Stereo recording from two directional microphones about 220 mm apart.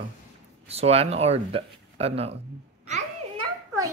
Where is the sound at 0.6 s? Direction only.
30° right (ahead or behind).